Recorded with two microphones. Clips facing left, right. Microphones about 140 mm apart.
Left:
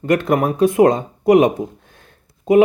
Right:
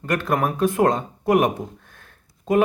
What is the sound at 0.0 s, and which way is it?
Speech, 20° left (ahead or behind).